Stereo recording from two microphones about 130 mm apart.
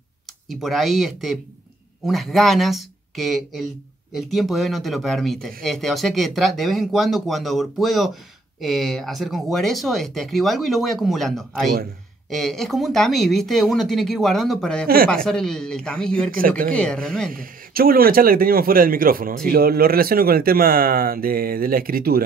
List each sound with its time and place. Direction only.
0.5 s speech: centre (ahead or behind)
16.3 s speech: 90° right
16.7 s speech: 10° left (ahead or behind)
18.0 s speech: 90° right